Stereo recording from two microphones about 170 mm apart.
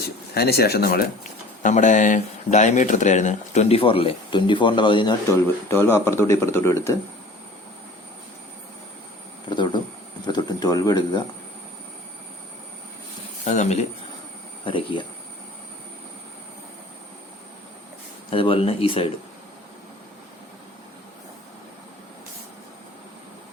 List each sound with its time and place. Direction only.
0.3 s speech: 70° left (ahead or behind); by 5.1 s 30° left (ahead or behind)
5.3 s speech: 15° left (ahead or behind)
9.5 s speech: 25° left (ahead or behind)
10.2 s bird: 25° left (ahead or behind)
13.4 s speech: 45° left (ahead or behind)
14.6 s speech: 30° left (ahead or behind)
18.3 s speech: 30° left (ahead or behind)